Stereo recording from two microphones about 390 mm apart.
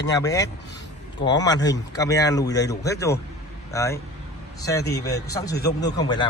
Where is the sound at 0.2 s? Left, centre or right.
Centre.